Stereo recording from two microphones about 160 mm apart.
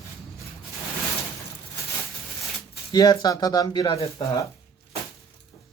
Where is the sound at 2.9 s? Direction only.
25° left (ahead or behind).